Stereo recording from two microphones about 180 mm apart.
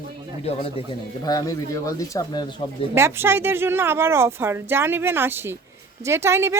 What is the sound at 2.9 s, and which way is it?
Speech, 15° right (ahead or behind).